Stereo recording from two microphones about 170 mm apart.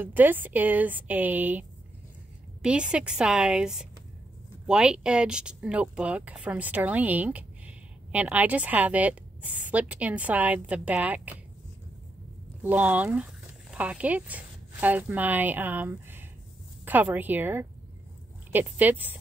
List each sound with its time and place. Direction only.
0.0 s a woman's voice: 10° right (ahead or behind)
12.6 s speech: 10° right (ahead or behind)